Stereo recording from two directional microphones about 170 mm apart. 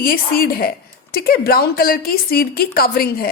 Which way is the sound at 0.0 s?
60° left (ahead or behind).